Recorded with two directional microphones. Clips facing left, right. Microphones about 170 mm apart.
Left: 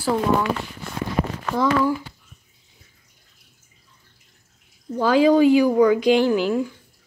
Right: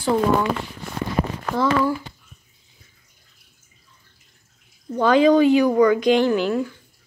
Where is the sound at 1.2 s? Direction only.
40° right (ahead or behind).